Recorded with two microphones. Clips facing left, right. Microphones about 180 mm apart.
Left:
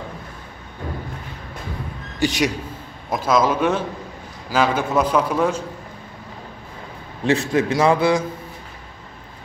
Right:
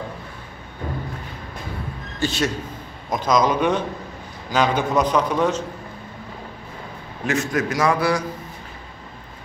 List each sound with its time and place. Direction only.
2.1 s a man's voice: 15° left (ahead or behind)
7.2 s a man's voice: 30° left (ahead or behind)